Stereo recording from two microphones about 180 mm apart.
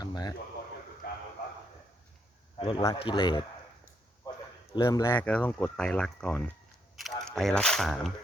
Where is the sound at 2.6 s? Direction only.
25° left (ahead or behind).